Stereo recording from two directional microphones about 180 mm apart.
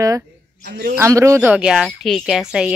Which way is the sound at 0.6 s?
60° right (ahead or behind).